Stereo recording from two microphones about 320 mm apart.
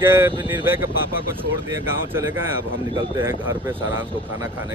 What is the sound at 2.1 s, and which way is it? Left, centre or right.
Speech, centre.